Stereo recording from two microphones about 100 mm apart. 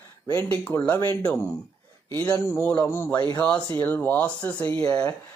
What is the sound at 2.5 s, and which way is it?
Speech, 15° left (ahead or behind).